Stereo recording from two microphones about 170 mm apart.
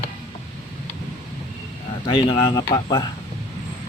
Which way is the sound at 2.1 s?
30° left (ahead or behind).